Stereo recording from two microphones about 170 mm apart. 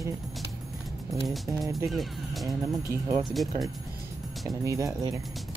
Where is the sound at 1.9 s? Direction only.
Centre (ahead or behind).